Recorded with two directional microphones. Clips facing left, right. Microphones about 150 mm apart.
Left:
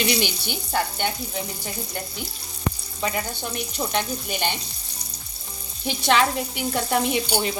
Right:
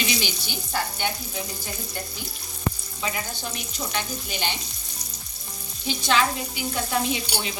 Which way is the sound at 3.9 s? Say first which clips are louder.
Left 3 dB; 55° left (ahead or behind).